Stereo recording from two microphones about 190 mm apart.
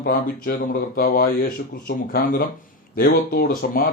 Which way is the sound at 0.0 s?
50° left (ahead or behind).